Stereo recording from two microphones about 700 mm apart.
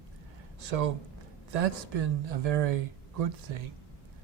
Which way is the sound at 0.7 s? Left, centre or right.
Right.